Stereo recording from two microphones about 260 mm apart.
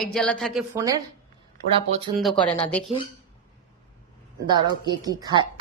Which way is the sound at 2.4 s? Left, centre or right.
Centre.